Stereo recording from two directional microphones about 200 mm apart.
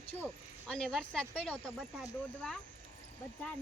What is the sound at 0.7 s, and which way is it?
Speech, 5° left (ahead or behind).